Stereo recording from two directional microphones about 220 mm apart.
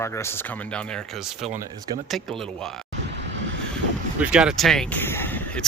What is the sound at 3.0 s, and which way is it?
Vehicle, 55° right (ahead or behind).